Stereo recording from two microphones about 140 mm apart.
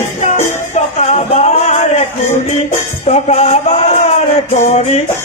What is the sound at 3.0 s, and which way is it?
Music, 50° left (ahead or behind).